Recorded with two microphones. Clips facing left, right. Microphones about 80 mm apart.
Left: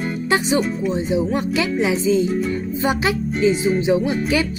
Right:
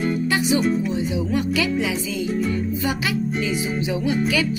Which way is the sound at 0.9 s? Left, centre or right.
Left.